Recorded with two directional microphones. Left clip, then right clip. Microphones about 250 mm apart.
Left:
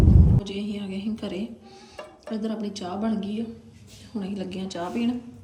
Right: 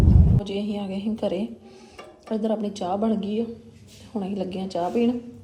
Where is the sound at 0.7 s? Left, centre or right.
Centre.